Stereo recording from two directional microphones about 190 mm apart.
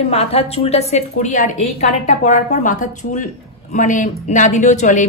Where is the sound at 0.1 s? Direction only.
30° left (ahead or behind).